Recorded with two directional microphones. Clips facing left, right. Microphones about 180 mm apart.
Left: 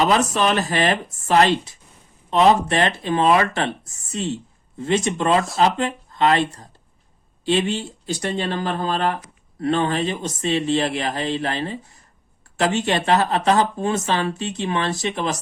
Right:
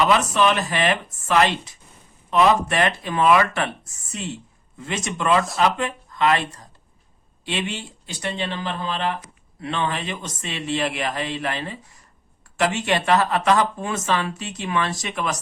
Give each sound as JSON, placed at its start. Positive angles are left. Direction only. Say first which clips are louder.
{"t": 0.0, "sound": "speech", "louder": "even", "side_deg": 35}
{"t": 4.8, "sound": "speech", "louder": "left 6 dB", "side_deg": 30}